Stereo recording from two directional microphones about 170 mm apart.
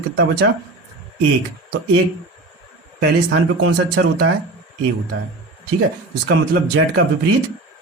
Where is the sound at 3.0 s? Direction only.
75° right (ahead or behind).